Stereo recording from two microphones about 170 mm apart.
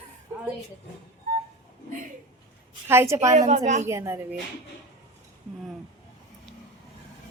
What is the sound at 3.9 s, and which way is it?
Speech, 15° right (ahead or behind).